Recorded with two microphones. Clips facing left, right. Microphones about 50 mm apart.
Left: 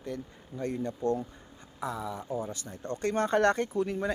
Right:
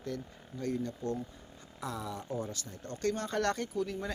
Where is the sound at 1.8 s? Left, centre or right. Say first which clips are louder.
Left 4 dB; centre.